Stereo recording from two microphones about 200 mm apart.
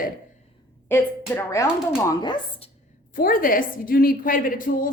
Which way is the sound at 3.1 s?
45° left (ahead or behind).